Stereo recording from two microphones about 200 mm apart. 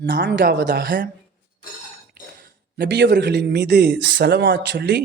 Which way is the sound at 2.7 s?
55° right (ahead or behind).